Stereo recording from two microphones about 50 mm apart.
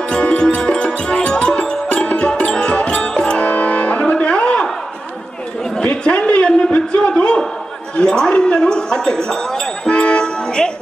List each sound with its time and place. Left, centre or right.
0.1 s music: centre
5.9 s a sound: left
7.9 s speech: centre